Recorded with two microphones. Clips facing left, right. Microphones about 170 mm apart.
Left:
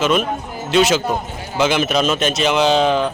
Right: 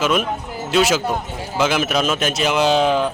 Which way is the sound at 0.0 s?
5° right (ahead or behind).